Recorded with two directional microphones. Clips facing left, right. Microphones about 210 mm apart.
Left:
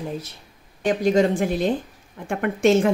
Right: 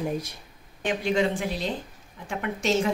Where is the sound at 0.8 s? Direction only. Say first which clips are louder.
Left 6 dB; 40° left (ahead or behind).